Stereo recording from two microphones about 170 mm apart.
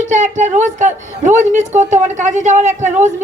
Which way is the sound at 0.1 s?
45° right (ahead or behind).